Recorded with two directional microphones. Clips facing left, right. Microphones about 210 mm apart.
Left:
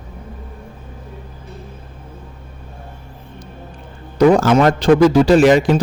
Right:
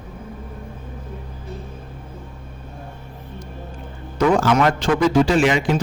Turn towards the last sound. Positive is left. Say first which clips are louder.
# left 7 dB
turn(degrees=40)  # may be behind; listen again after turning